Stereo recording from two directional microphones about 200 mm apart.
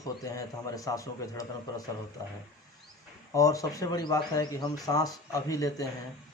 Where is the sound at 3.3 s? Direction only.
15° left (ahead or behind).